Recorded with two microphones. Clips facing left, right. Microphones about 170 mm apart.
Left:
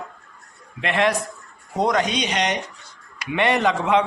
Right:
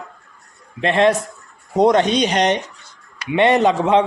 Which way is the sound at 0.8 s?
25° right (ahead or behind).